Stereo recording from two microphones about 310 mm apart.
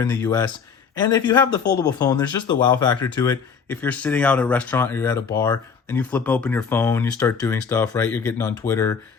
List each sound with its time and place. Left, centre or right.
0.0 s speech: centre